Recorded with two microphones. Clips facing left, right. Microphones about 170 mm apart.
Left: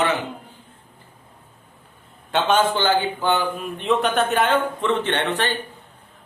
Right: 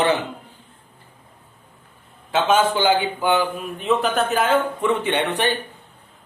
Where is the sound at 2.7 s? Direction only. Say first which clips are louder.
Right 1 dB; 15° right (ahead or behind).